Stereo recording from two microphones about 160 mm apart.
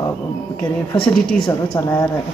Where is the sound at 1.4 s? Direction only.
25° left (ahead or behind).